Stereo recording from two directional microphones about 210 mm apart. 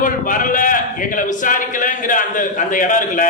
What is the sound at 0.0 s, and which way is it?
A man's voice, 40° left (ahead or behind).